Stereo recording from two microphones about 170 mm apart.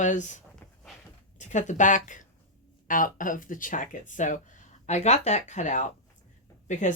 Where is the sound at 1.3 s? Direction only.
45° left (ahead or behind).